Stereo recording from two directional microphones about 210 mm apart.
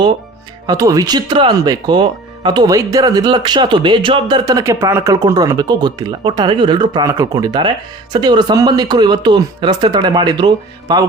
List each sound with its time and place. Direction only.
0.7 s speech: 15° right (ahead or behind)